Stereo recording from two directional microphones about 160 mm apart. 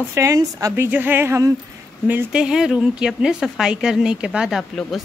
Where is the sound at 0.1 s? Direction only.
20° right (ahead or behind).